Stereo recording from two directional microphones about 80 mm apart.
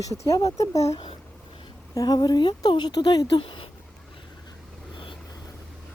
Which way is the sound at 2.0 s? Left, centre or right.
Left.